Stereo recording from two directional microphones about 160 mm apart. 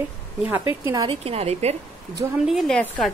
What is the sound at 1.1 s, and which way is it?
Speech, 40° right (ahead or behind).